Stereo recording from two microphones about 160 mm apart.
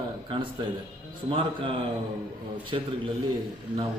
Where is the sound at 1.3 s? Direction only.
35° right (ahead or behind).